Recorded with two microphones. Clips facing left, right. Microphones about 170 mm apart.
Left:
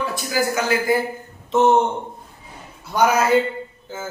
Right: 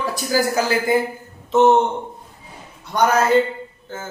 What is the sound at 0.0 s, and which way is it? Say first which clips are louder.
Speech: right 2 dB; 40° right (ahead or behind).